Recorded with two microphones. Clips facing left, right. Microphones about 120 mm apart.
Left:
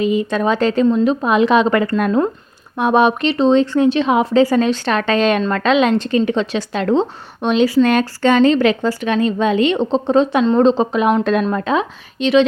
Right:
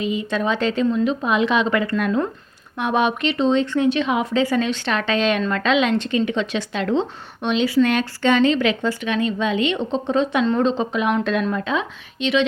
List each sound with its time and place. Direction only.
0.0 s speech: 45° left (ahead or behind)